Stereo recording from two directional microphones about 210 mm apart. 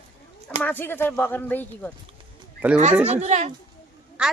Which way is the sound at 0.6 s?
10° left (ahead or behind).